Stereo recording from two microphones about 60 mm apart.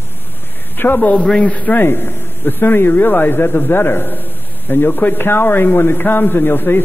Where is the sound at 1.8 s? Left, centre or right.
Left.